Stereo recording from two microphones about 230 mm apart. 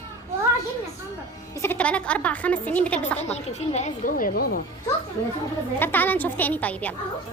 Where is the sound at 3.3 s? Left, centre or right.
Left.